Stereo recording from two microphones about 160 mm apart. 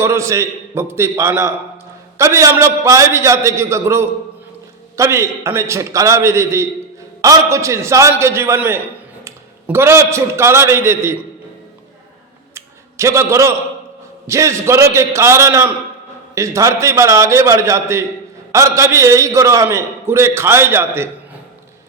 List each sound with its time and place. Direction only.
0.0 s a man's voice: 20° right (ahead or behind)
12.5 s a sound: 20° right (ahead or behind)
14.3 s a man's voice: 20° right (ahead or behind)